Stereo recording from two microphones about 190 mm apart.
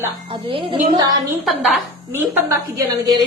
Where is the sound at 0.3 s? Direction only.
25° right (ahead or behind).